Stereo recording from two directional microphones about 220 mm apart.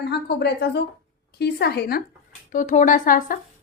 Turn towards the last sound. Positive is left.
turn(degrees=40)  # may be behind; listen again after turning